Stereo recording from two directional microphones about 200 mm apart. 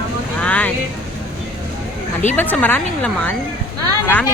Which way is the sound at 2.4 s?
10° left (ahead or behind).